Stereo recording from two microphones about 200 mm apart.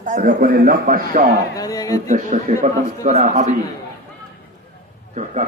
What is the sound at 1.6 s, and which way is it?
Speech, 15° left (ahead or behind).